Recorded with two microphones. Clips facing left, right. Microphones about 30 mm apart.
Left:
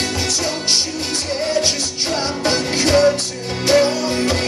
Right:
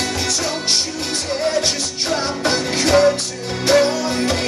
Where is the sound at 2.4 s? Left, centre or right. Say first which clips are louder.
Left 2 dB; left.